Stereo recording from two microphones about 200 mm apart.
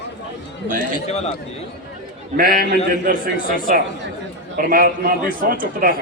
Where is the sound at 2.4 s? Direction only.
50° left (ahead or behind).